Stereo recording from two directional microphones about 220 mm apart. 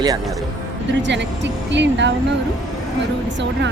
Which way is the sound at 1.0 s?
55° right (ahead or behind).